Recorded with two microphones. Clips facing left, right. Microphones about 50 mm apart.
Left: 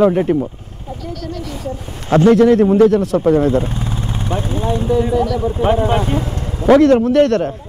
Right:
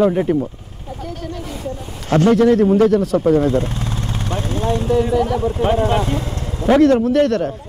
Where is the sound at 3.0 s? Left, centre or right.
Centre.